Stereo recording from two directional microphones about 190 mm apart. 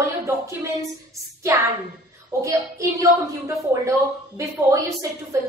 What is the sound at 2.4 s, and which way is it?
A woman's voice, 15° right (ahead or behind).